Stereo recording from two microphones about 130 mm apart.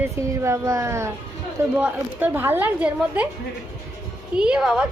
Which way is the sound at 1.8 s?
10° right (ahead or behind).